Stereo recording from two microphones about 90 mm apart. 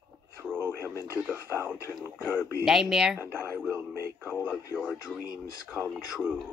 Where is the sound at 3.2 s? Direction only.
25° right (ahead or behind).